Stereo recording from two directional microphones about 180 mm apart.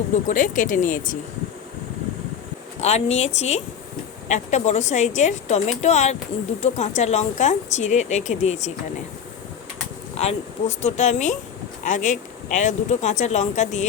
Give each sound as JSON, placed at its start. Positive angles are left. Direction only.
{"t": 0.3, "sound": "speech", "side_deg": 45}
{"t": 2.8, "sound": "speech", "side_deg": 35}
{"t": 10.2, "sound": "speech", "side_deg": 35}